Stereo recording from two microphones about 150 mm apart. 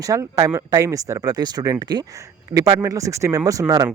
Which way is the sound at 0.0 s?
20° right (ahead or behind).